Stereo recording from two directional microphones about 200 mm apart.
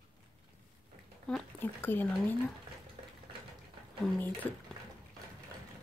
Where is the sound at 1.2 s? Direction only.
5° left (ahead or behind).